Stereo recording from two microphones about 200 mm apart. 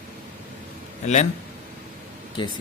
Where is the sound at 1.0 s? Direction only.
35° left (ahead or behind).